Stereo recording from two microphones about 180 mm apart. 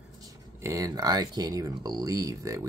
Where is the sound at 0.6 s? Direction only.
15° right (ahead or behind).